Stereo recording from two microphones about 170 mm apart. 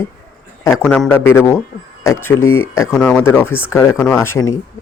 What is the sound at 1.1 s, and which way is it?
Speech, 15° left (ahead or behind).